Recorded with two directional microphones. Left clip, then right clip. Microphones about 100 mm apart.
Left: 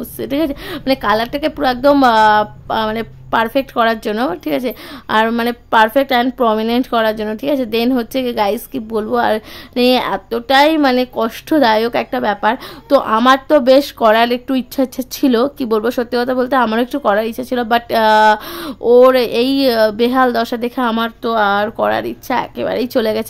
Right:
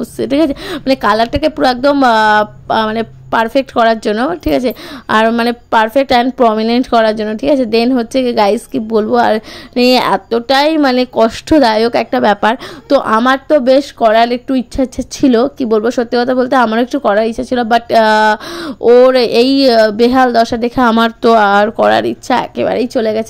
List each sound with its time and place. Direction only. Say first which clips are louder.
0.0 s a woman's voice: right 6 dB; 45° right (ahead or behind)
3.3 s a woman's voice: right 2 dB; 45° right (ahead or behind)
4.1 s speech: right 3 dB; 25° right (ahead or behind)
4.5 s a woman's voice: right 5 dB; 40° right (ahead or behind)
5.7 s a woman's voice: right 1 dB; 40° right (ahead or behind)
12.3 s a woman's voice: right 4 dB; 60° right (ahead or behind)
12.8 s a woman's voice: right 2 dB; 40° right (ahead or behind)
13.2 s speech: even; 10° right (ahead or behind)
17.0 s a woman's voice: right 4 dB; 30° right (ahead or behind)
21.0 s speech: right 7 dB; 65° right (ahead or behind)
21.6 s a woman's voice: right 6 dB; 35° right (ahead or behind)
22.9 s a woman's voice: right 2 dB; 15° right (ahead or behind)